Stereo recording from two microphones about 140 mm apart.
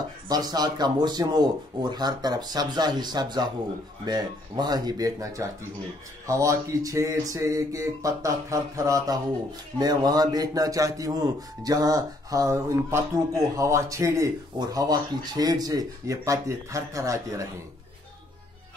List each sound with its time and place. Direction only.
0.3 s a man's voice: 30° right (ahead or behind)